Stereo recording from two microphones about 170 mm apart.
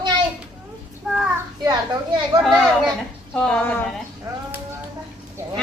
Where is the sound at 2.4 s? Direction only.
Centre (ahead or behind).